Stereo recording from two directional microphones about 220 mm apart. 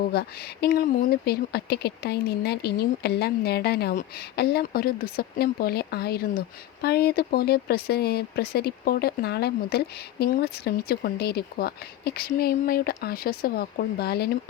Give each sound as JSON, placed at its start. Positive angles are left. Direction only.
{"t": 0.1, "sound": "speech", "side_deg": 45}